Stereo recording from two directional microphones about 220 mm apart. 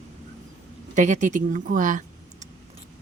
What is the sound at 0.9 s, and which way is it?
Speech, 35° right (ahead or behind).